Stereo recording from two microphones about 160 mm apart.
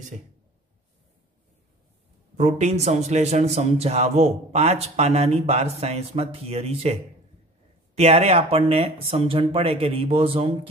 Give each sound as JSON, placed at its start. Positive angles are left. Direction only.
{"t": 2.3, "sound": "a man's voice", "side_deg": -45}